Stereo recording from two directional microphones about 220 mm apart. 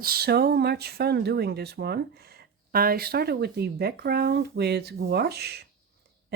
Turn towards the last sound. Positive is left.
turn(degrees=-45)  # may be behind; listen again after turning